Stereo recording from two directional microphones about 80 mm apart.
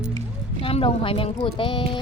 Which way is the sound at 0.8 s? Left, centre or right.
Left.